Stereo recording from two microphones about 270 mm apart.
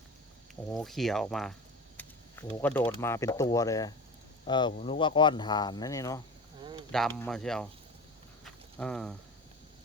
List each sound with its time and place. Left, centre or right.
0.7 s speech: centre
2.0 s a sound: centre
2.5 s speech: centre
6.9 s speech: centre
8.8 s speech: centre